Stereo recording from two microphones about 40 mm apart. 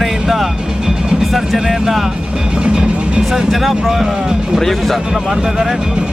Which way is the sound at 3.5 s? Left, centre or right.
Centre.